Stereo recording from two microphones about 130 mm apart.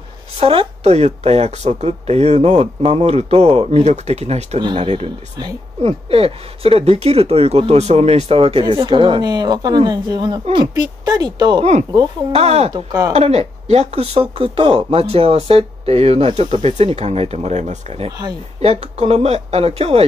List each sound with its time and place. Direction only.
0.4 s speech: 45° right (ahead or behind)
4.6 s speech: 35° right (ahead or behind)
12.3 s speech: 50° right (ahead or behind)
12.7 s speech: 30° right (ahead or behind)
13.1 s speech: 55° right (ahead or behind)